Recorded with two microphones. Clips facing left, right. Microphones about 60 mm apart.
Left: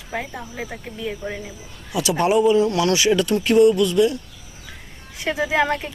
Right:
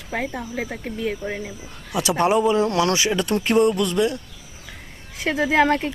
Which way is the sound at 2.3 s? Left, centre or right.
Right.